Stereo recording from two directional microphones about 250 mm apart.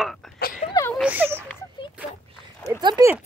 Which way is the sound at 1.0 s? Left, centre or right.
Centre.